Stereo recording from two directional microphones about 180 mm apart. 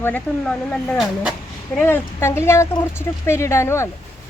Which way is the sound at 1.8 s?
15° left (ahead or behind).